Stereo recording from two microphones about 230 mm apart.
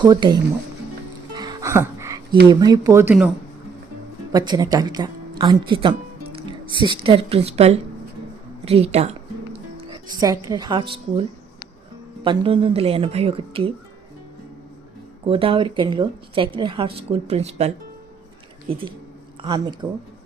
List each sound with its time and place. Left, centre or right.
0.0 s speech: centre
1.4 s music: centre
2.5 s speech: centre
4.3 s a woman's voice: centre
15.3 s a woman's voice: right
18.7 s a woman's voice: right